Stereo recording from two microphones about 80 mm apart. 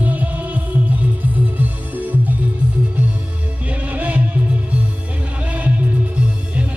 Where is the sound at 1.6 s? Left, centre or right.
Right.